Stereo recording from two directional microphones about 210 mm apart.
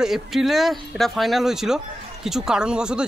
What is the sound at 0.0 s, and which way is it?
Speech, centre (ahead or behind).